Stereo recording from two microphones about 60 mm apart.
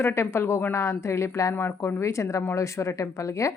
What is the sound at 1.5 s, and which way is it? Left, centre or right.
Speech, left.